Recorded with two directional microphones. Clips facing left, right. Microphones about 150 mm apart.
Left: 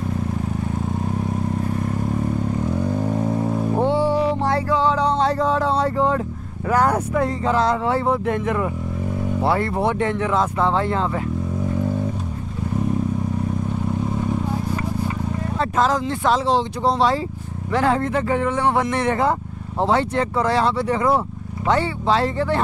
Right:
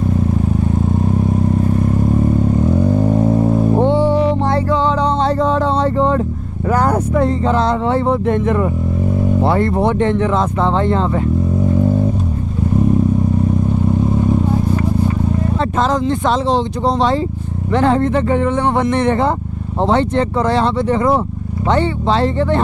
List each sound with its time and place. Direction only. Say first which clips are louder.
3.2 s vehicle: right 7 dB; 35° right (ahead or behind)
4.1 s music: right 5 dB; 25° right (ahead or behind)
6.7 s speech: right 3 dB; 30° right (ahead or behind)
16.4 s speech: right 3 dB; 5° left (ahead or behind)
17.7 s speech: right 5 dB; 25° right (ahead or behind)